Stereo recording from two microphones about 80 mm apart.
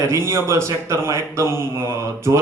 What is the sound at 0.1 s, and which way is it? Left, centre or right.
Speech, right.